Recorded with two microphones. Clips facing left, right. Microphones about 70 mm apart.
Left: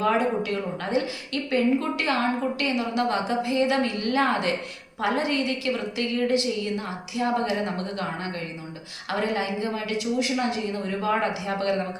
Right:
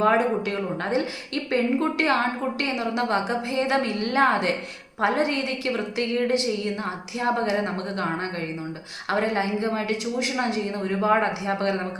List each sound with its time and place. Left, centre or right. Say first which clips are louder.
0.0 s a woman's voice: right 2 dB; right